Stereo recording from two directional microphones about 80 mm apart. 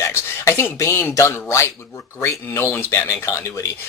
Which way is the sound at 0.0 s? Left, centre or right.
Left.